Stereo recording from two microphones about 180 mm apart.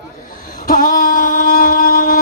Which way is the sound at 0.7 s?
50° left (ahead or behind).